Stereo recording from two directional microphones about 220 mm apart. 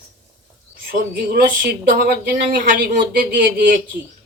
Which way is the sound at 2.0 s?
40° right (ahead or behind).